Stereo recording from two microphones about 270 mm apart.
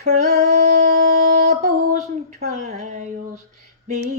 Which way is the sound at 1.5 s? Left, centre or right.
Right.